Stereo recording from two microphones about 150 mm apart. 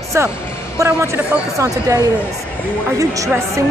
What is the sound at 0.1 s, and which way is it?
A woman's voice, 20° right (ahead or behind).